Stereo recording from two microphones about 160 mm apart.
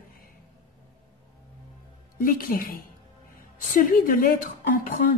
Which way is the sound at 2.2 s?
65° left (ahead or behind).